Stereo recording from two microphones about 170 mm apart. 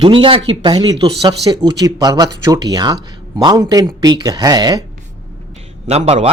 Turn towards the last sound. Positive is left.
turn(degrees=-40)  # may be behind; listen again after turning